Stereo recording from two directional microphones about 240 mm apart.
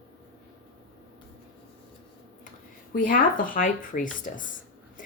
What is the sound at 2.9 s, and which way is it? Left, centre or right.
Speech, left.